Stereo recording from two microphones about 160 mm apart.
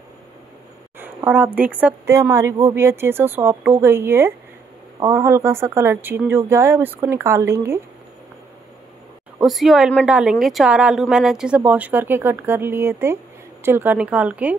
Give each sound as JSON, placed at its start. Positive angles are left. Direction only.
{"t": 0.9, "sound": "a woman's voice", "side_deg": -10}
{"t": 2.0, "sound": "a woman's voice", "side_deg": -20}
{"t": 9.4, "sound": "a woman's voice", "side_deg": 0}